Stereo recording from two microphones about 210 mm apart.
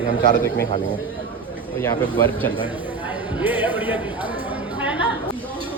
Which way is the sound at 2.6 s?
10° right (ahead or behind).